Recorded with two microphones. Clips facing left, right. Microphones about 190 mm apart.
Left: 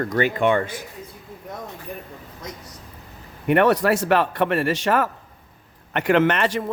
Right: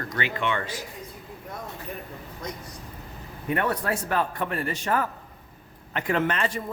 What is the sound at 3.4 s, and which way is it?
A man's voice, 80° left.